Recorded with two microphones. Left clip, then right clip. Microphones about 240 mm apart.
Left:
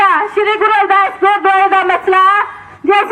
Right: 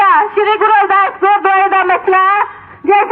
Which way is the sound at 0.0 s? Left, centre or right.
Left.